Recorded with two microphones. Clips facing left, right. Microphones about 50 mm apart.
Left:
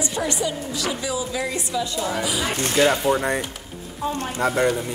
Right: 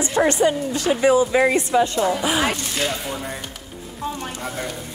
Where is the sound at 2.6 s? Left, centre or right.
Left.